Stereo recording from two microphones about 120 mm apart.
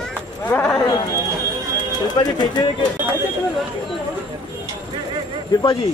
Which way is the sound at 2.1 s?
35° left (ahead or behind).